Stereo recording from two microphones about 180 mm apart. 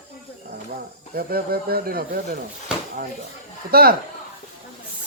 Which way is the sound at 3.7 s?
55° right (ahead or behind).